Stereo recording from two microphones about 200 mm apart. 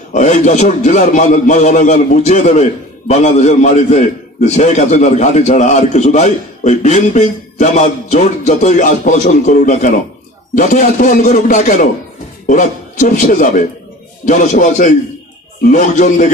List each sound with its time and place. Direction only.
0.1 s a man's voice: 35° left (ahead or behind)
13.1 s a man's voice: 40° left (ahead or behind)